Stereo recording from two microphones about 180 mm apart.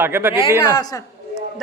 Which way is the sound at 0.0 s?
10° right (ahead or behind).